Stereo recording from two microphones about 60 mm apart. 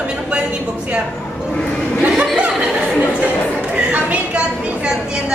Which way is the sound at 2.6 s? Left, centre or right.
Centre.